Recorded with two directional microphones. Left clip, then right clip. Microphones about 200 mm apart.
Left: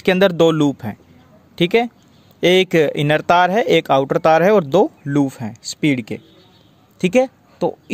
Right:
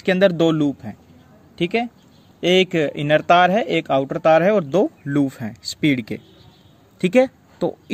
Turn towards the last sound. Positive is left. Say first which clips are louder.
# left 3 dB
turn(degrees=10)  # may be behind; listen again after turning